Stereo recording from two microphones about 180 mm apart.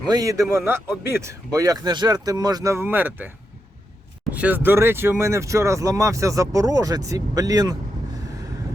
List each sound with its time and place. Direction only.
0.1 s a man's voice: 20° right (ahead or behind)
4.4 s speech: 10° right (ahead or behind)